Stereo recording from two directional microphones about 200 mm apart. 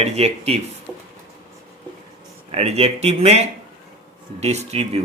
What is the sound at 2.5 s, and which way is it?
Speech, 30° right (ahead or behind).